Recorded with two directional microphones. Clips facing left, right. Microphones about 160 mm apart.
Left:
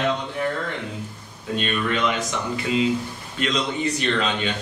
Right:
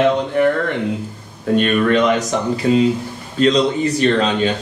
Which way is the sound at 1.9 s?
40° right (ahead or behind).